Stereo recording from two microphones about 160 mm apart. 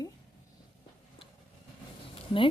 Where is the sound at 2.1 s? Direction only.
35° left (ahead or behind).